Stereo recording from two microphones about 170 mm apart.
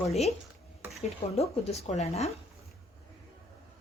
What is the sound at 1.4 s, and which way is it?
Speech, 40° left (ahead or behind).